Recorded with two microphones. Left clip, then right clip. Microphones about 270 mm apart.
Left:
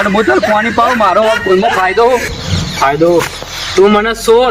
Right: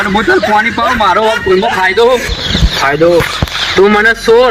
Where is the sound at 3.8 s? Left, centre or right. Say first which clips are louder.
Right 1 dB; centre.